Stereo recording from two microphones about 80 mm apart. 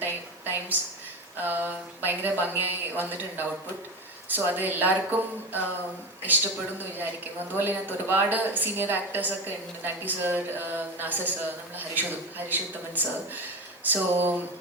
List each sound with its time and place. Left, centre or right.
0.0 s a sound: right
1.4 s speech: right
7.5 s speech: right
12.5 s speech: right